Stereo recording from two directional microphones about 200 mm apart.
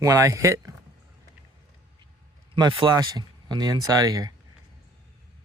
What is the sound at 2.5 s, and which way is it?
Speech, 25° right (ahead or behind).